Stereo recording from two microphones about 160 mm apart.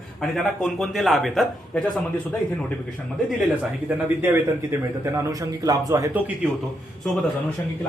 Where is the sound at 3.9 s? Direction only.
10° right (ahead or behind).